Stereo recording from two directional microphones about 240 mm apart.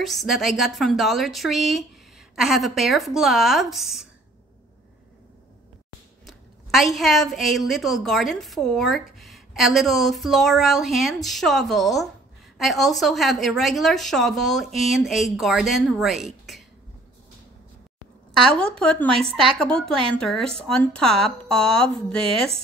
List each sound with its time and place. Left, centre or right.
0.0 s a woman's voice: centre
6.2 s a woman's voice: centre
18.6 s a woman's voice: centre